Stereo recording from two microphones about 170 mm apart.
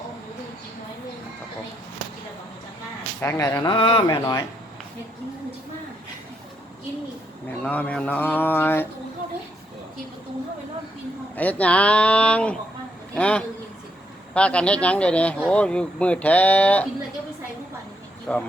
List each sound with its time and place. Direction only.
3.2 s speech: 15° left (ahead or behind)
7.6 s speech: 10° left (ahead or behind)
11.3 s speech: 10° left (ahead or behind)
18.3 s speech: 5° left (ahead or behind)